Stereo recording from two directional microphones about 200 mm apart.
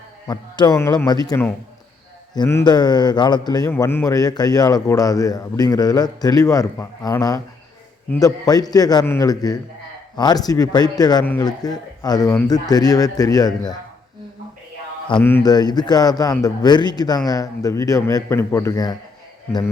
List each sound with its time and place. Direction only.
0.3 s a man's voice: 20° left (ahead or behind)
15.2 s a man's voice: 10° left (ahead or behind)